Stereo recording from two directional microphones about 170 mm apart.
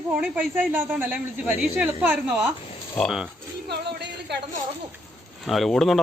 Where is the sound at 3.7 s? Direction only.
75° right (ahead or behind).